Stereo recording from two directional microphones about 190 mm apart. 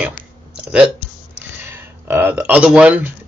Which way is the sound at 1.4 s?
10° right (ahead or behind).